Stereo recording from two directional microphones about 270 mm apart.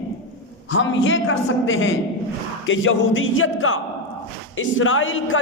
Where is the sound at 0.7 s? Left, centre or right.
Left.